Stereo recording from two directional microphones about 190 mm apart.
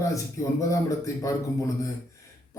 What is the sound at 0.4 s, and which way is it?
Speech, 15° left (ahead or behind).